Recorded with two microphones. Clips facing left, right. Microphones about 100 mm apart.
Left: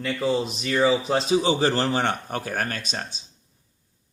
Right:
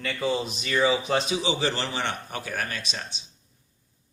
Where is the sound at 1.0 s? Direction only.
35° left (ahead or behind).